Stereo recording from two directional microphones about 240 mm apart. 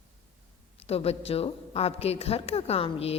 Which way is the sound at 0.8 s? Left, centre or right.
Left.